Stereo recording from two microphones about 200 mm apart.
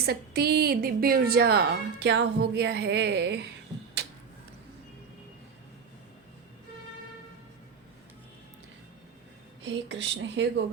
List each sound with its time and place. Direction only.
0.0 s a woman's voice: 50° right (ahead or behind)
9.6 s speech: 65° right (ahead or behind)